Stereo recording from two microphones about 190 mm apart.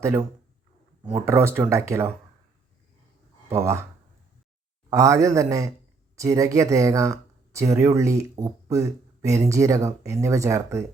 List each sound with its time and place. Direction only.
1.2 s speech: 15° right (ahead or behind)
3.5 s speech: 15° right (ahead or behind)
4.9 s speech: 15° right (ahead or behind)